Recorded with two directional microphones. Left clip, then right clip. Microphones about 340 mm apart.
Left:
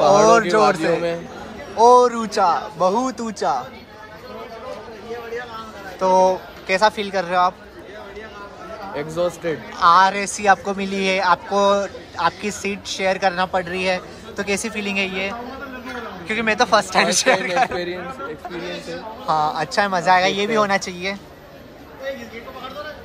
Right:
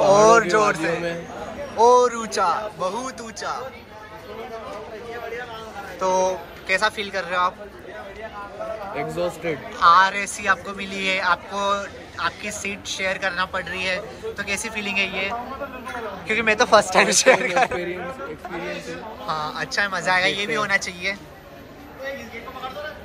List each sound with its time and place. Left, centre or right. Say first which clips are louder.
0.0 s a man's voice: left 1 dB; centre
5.9 s a man's voice: left 5 dB; centre
9.1 s a man's voice: left 6 dB; centre
19.2 s a man's voice: left 7 dB; centre